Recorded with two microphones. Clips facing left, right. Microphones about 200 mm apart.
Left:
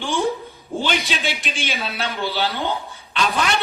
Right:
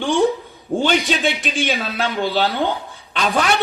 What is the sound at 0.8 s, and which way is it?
A man's voice, 50° right (ahead or behind).